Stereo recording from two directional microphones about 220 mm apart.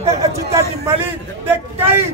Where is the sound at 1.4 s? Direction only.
10° right (ahead or behind).